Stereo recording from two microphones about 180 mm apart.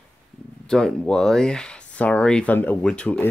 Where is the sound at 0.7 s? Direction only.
5° left (ahead or behind).